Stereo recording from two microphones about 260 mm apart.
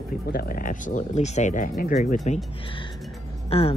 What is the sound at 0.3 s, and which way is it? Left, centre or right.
Speech, left.